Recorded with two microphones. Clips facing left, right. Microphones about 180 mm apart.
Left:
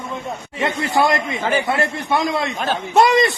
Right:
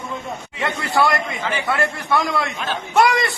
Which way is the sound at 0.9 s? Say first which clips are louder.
Left 1 dB; 20° left (ahead or behind).